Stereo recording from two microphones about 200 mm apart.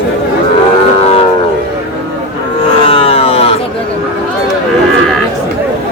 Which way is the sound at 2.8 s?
30° left (ahead or behind).